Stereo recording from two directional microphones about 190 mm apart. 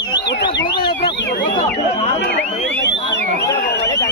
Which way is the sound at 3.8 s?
15° left (ahead or behind).